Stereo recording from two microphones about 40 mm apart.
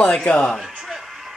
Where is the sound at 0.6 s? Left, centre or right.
Centre.